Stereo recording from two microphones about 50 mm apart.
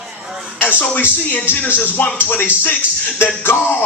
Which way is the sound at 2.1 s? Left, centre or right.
Left.